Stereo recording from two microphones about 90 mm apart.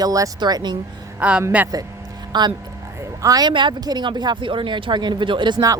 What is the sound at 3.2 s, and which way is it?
Speech, 40° right (ahead or behind).